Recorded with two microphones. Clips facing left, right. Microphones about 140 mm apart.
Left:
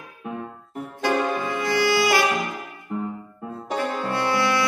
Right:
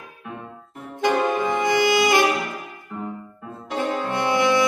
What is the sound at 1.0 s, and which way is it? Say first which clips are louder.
Saxophone: right 3 dB; 20° right (ahead or behind).